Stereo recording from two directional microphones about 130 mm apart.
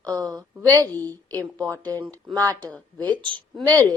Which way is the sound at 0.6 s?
30° right (ahead or behind).